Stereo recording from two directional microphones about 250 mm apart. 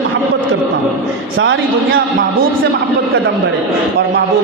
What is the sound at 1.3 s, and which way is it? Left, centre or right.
Speech, right.